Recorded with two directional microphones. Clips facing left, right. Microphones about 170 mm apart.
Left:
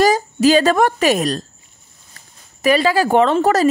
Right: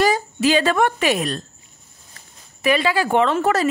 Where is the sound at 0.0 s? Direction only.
40° left (ahead or behind).